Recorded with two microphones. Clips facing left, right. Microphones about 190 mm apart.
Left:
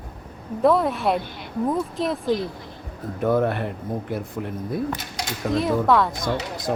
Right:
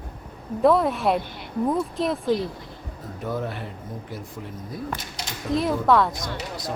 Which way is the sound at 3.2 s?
60° left (ahead or behind).